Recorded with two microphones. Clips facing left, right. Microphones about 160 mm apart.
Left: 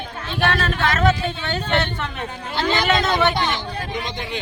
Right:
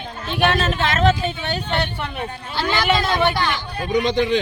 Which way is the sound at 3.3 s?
20° left (ahead or behind).